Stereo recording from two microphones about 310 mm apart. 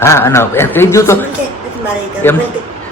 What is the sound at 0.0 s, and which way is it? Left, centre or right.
Speech, centre.